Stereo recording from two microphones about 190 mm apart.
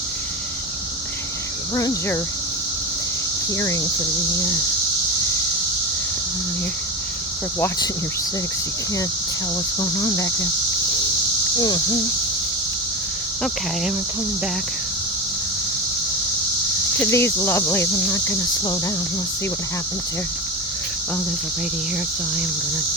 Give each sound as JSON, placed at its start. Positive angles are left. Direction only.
{"t": 1.7, "sound": "speech", "side_deg": 20}
{"t": 10.0, "sound": "cricket", "side_deg": 20}
{"t": 17.0, "sound": "speech", "side_deg": 15}